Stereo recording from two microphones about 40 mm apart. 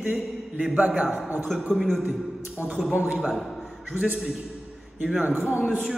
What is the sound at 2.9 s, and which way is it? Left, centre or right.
Speech, right.